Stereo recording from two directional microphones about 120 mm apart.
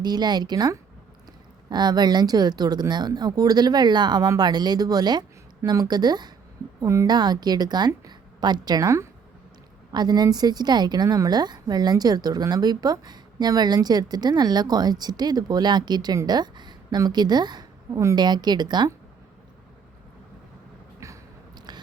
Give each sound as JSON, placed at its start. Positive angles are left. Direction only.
{"t": 0.0, "sound": "a woman's voice", "side_deg": -35}
{"t": 6.7, "sound": "a woman's voice", "side_deg": -25}
{"t": 7.1, "sound": "a woman's voice", "side_deg": -35}